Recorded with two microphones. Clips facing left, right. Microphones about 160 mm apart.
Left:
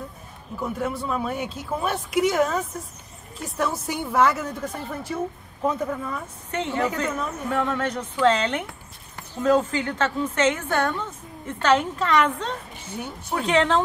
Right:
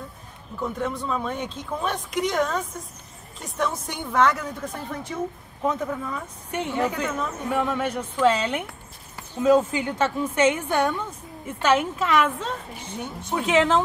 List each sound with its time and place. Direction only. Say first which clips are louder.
0.6 s a woman's voice: even; 5° left (ahead or behind)
6.5 s a woman's voice: even; 10° right (ahead or behind)
12.9 s a woman's voice: even; 5° left (ahead or behind)